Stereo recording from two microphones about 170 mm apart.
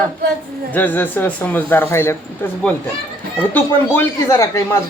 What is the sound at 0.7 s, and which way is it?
Speech, 10° left (ahead or behind).